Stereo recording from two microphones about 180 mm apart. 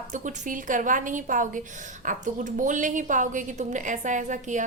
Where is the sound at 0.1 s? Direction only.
45° right (ahead or behind).